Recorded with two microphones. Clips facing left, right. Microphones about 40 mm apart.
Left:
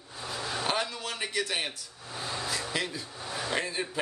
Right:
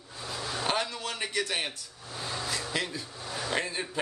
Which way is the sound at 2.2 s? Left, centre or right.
Centre.